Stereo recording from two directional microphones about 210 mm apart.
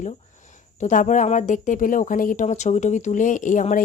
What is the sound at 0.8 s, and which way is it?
Speech, 35° left (ahead or behind).